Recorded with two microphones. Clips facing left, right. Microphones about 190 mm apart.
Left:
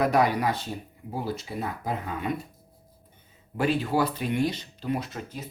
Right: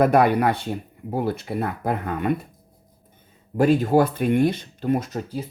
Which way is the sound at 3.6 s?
45° right (ahead or behind).